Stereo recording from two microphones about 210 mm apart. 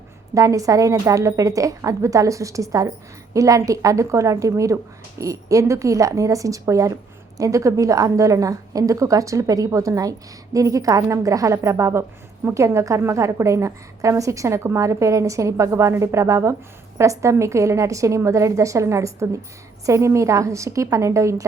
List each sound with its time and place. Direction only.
0.3 s a woman's voice: 15° right (ahead or behind)